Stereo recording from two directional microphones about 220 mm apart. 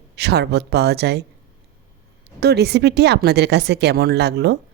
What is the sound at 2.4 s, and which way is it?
A woman's voice, 50° right (ahead or behind).